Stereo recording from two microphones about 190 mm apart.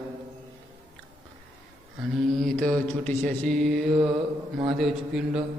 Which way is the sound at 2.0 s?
Centre (ahead or behind).